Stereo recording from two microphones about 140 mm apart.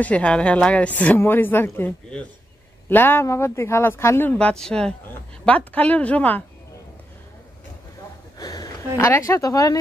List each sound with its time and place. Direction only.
0.0 s speech: 10° left (ahead or behind)
8.4 s a sound: 25° left (ahead or behind)
8.9 s speech: 20° left (ahead or behind)